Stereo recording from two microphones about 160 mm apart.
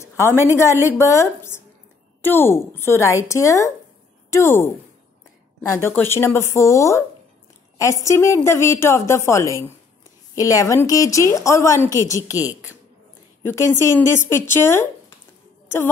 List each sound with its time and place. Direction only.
0.0 s a woman's voice: 15° left (ahead or behind)